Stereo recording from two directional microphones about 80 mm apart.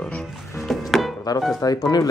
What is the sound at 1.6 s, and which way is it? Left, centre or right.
Speech, left.